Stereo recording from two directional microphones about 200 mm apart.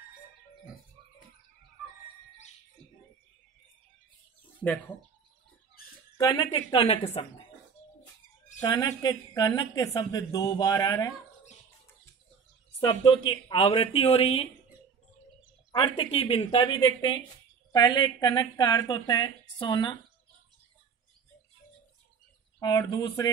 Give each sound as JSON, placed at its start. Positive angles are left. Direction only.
{"t": 6.1, "sound": "a woman's voice", "side_deg": 20}
{"t": 8.6, "sound": "a woman's voice", "side_deg": 20}
{"t": 12.8, "sound": "a woman's voice", "side_deg": 25}
{"t": 15.7, "sound": "a woman's voice", "side_deg": 25}
{"t": 22.6, "sound": "a woman's voice", "side_deg": 20}